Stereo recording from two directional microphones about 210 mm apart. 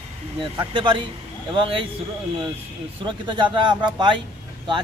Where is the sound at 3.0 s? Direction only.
20° right (ahead or behind).